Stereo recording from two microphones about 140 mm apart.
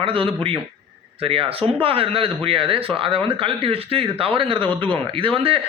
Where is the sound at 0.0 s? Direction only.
40° right (ahead or behind).